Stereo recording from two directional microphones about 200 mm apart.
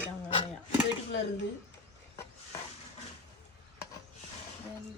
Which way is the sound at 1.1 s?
60° left (ahead or behind).